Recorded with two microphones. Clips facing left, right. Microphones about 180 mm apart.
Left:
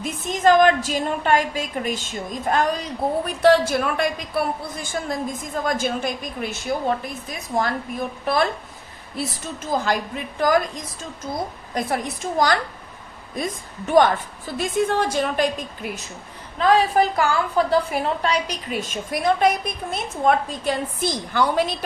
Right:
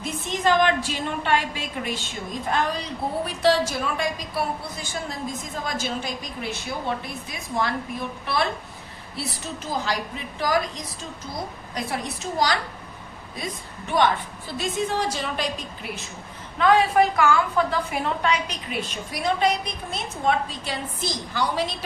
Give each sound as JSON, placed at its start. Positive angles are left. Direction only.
{"t": 0.0, "sound": "a woman's voice", "side_deg": 45}
{"t": 3.2, "sound": "a woman's voice", "side_deg": 55}
{"t": 9.6, "sound": "a woman's voice", "side_deg": 50}
{"t": 16.6, "sound": "a woman's voice", "side_deg": 35}